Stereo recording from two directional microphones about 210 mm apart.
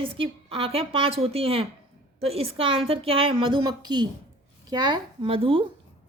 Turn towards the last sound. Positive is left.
turn(degrees=-25)  # may be behind; listen again after turning